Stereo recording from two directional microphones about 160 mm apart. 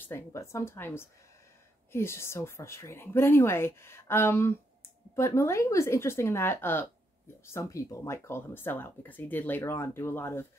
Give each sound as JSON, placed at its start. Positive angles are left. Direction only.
{"t": 0.0, "sound": "speech", "side_deg": 15}